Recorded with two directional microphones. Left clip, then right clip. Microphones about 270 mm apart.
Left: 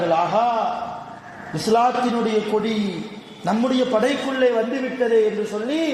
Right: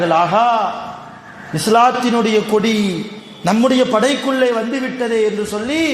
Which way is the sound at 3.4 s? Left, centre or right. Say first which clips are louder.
Right 7 dB; right.